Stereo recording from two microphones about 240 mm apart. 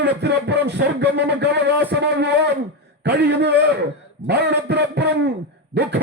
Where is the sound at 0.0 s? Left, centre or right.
Right.